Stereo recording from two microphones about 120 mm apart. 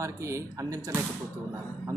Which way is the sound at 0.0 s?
25° right (ahead or behind).